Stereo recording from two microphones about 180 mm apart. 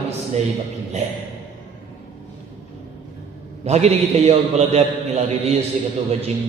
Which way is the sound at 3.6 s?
35° right (ahead or behind).